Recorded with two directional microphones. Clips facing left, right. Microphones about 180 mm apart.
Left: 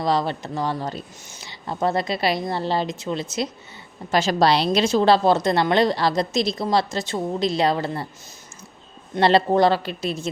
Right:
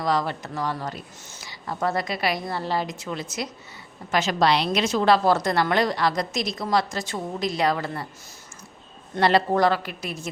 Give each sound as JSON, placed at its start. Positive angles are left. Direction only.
{"t": 0.0, "sound": "a woman's voice", "side_deg": 25}
{"t": 9.2, "sound": "a woman's voice", "side_deg": 25}